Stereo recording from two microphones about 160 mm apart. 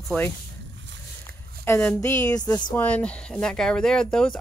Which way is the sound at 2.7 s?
10° left (ahead or behind).